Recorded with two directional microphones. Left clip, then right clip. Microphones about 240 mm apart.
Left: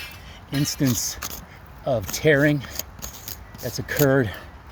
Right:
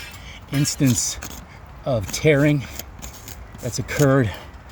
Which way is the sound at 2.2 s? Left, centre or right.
Right.